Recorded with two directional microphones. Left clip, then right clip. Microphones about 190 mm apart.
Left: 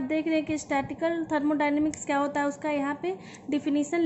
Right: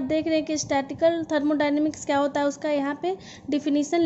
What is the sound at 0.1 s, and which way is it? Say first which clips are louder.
A woman's voice: right 3 dB; 40° right (ahead or behind).